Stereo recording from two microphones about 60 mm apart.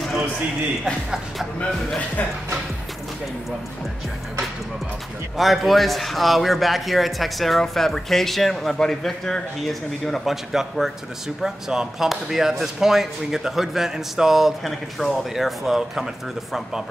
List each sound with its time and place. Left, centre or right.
5.4 s a man's voice: centre